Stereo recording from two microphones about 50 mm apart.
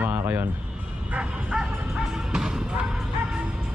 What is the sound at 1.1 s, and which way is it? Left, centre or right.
Bow-wow, centre.